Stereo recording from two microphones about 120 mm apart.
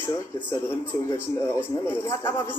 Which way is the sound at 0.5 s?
20° left (ahead or behind).